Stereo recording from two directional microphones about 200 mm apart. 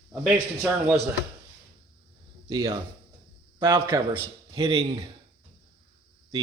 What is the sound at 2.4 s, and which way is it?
A man's voice, 25° right (ahead or behind).